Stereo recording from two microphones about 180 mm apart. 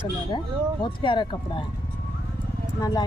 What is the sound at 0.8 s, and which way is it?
Speech, 25° left (ahead or behind).